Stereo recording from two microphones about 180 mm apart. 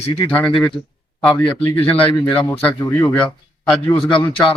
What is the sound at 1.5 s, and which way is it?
Speech, 30° left (ahead or behind).